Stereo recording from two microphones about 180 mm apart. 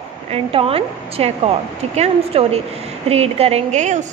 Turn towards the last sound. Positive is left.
turn(degrees=-40)  # may be behind; listen again after turning